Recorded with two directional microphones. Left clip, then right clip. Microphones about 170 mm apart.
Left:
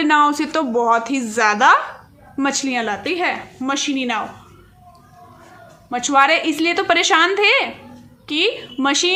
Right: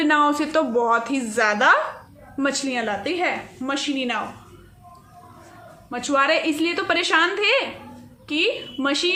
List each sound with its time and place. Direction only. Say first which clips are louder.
0.0 s a woman's voice: left 4 dB; 25° left (ahead or behind)
5.9 s a woman's voice: left 5 dB; 30° left (ahead or behind)